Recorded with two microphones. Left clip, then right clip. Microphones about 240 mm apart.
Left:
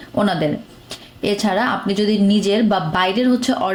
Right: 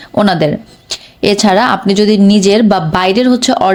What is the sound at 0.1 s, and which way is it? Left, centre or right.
Speech, right.